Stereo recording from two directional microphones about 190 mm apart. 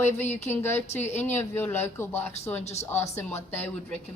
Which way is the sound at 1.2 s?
10° left (ahead or behind).